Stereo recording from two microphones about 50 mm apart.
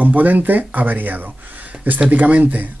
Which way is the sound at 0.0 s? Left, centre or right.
Right.